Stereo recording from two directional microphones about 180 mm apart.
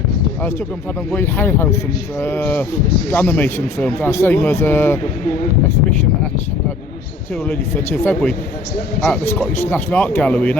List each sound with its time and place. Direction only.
1.1 s speech: 10° left (ahead or behind)
7.4 s speech: 10° left (ahead or behind)